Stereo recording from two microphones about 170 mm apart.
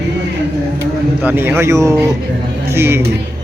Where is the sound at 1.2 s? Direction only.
10° right (ahead or behind).